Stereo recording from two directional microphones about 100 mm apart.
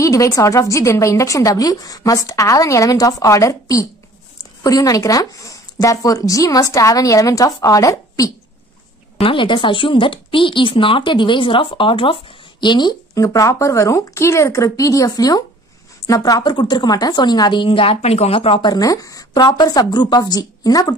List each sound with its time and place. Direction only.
0.0 s a woman's voice: 35° left (ahead or behind)
9.2 s speech: 60° left (ahead or behind)
13.1 s a woman's voice: 35° left (ahead or behind); by 18.6 s 75° left (ahead or behind)
18.6 s a woman's voice: 40° left (ahead or behind)